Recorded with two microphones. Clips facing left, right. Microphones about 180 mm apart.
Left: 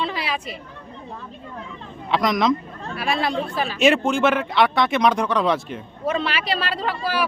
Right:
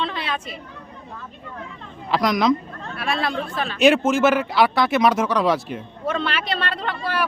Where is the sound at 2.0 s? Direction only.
Centre (ahead or behind).